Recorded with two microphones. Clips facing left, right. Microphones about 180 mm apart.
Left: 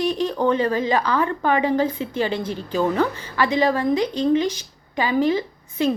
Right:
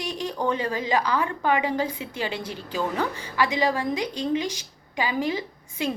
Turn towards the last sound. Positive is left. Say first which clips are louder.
# left 7 dB
turn(degrees=-15)  # may be behind; listen again after turning